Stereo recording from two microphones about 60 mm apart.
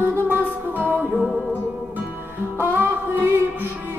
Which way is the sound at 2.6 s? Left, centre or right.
Right.